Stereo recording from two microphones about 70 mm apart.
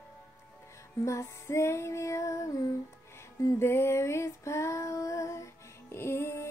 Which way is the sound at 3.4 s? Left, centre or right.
Left.